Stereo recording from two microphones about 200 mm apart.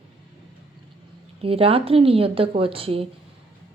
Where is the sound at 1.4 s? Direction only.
30° right (ahead or behind).